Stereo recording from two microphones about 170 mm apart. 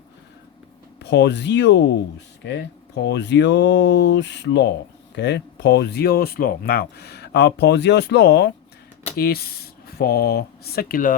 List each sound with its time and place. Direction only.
1.0 s speech: 90° left
9.1 s speech: 65° left (ahead or behind)